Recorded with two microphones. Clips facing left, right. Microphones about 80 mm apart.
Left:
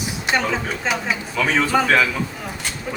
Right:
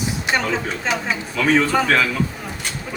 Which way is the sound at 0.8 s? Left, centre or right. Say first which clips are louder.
Even; centre.